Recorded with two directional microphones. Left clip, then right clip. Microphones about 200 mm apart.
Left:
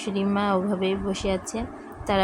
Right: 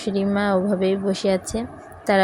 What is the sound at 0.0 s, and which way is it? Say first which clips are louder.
A woman's voice: right 3 dB; 15° right (ahead or behind).